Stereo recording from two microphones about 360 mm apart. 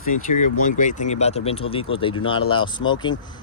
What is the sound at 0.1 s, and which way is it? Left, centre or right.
Speech, left.